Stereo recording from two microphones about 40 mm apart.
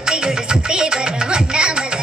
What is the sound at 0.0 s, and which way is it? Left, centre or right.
Music, centre.